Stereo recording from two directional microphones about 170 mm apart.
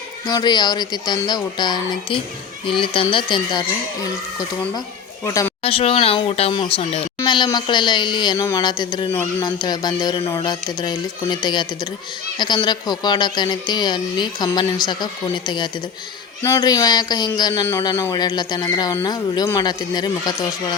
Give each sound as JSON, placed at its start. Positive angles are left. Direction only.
{"t": 0.3, "sound": "speech", "side_deg": 25}
{"t": 5.2, "sound": "speech", "side_deg": 20}
{"t": 5.6, "sound": "speech", "side_deg": 35}